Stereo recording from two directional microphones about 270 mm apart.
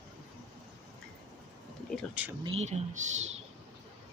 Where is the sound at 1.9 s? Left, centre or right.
Centre.